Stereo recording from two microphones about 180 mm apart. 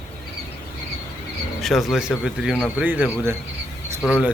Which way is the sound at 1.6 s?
Centre (ahead or behind).